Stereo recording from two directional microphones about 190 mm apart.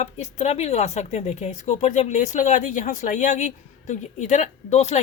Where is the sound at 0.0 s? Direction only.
35° left (ahead or behind).